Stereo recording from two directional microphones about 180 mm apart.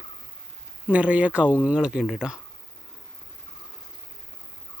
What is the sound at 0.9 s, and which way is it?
Speech, 5° right (ahead or behind).